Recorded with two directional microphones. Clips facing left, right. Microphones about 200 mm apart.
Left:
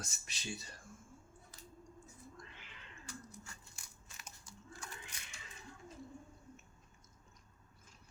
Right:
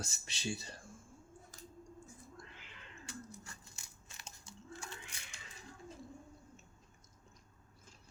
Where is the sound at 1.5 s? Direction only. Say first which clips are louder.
Right 3 dB; 45° right (ahead or behind).